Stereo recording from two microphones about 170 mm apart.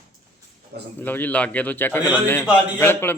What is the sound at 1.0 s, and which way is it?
Speech, 10° left (ahead or behind).